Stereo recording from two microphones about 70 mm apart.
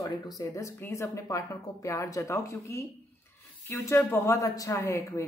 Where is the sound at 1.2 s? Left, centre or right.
Left.